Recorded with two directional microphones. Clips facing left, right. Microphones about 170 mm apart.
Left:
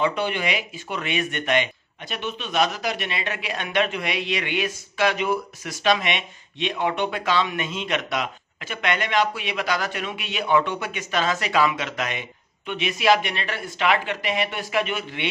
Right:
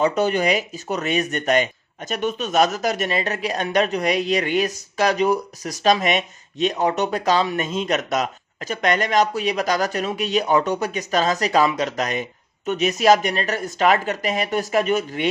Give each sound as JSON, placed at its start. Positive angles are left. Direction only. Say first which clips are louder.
{"t": 0.0, "sound": "speech", "louder": "right 5 dB", "side_deg": -40}